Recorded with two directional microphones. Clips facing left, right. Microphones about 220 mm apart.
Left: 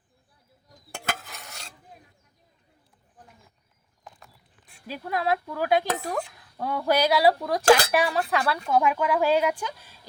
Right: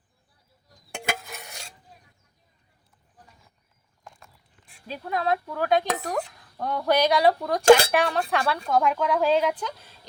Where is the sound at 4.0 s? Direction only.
5° left (ahead or behind).